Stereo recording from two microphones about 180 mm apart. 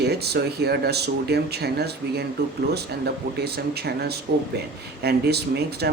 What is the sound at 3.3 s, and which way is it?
Speech, 60° right (ahead or behind).